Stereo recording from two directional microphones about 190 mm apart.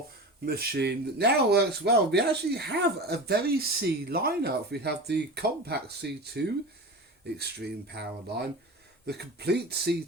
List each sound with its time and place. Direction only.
0.4 s speech: 50° right (ahead or behind)